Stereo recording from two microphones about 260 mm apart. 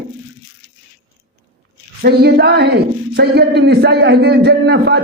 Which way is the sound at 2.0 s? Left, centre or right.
Right.